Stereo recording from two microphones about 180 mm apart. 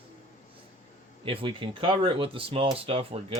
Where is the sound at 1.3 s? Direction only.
30° right (ahead or behind).